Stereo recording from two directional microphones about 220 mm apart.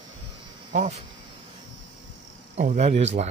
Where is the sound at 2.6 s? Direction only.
30° right (ahead or behind).